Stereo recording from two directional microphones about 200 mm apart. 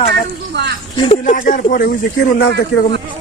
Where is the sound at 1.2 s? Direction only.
40° left (ahead or behind).